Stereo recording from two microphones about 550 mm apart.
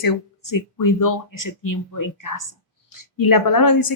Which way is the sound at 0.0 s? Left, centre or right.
Left.